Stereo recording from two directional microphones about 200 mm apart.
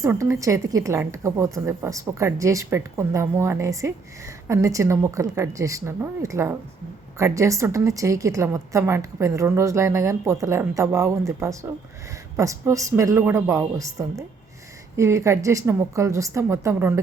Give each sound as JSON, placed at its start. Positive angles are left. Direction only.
{"t": 0.0, "sound": "a woman's voice", "side_deg": -15}